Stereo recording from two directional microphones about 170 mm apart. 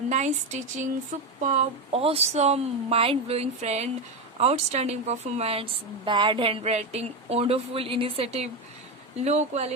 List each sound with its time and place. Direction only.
0.1 s speech: 45° right (ahead or behind)
1.1 s a sound: 45° right (ahead or behind)
1.5 s speech: 40° right (ahead or behind)